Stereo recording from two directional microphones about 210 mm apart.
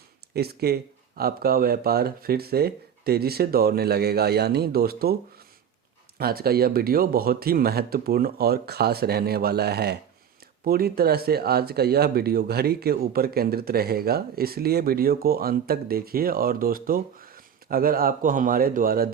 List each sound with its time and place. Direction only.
0.3 s speech: 50° right (ahead or behind)
6.1 s speech: 45° right (ahead or behind)